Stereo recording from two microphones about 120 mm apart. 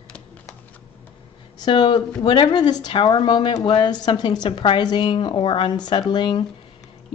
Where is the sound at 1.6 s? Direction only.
45° left (ahead or behind).